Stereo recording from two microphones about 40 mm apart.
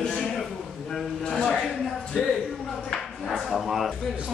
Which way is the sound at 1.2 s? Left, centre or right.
Left.